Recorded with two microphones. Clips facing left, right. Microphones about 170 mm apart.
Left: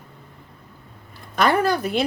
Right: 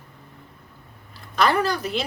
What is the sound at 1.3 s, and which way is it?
Speech, 50° left (ahead or behind).